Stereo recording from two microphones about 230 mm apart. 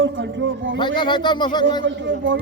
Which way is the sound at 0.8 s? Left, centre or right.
Centre.